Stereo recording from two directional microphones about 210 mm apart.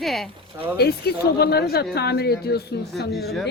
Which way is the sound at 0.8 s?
45° left (ahead or behind).